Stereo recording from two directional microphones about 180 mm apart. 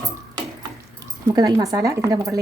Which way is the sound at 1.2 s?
20° right (ahead or behind).